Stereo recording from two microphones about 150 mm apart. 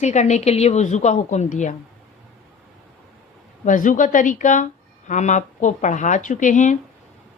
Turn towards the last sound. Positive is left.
turn(degrees=55)  # may be behind; listen again after turning